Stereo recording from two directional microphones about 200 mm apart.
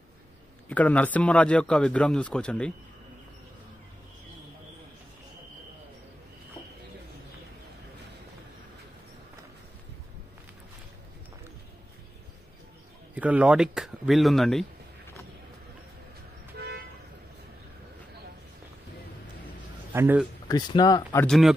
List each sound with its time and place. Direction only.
0.7 s a man's voice: 10° left (ahead or behind)
13.1 s a man's voice: 5° right (ahead or behind)
16.5 s toot: 55° right (ahead or behind)
19.9 s a man's voice: 10° right (ahead or behind)
20.4 s speech: 20° left (ahead or behind)
21.3 s a man's voice: centre (ahead or behind)